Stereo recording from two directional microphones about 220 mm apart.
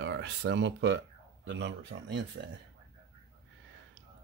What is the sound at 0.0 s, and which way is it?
Speech, 50° right (ahead or behind).